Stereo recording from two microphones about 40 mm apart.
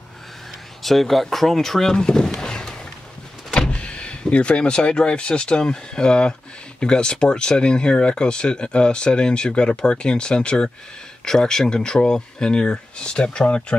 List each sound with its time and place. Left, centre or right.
0.8 s speech: centre
2.4 s a sound: centre
3.5 s speech: left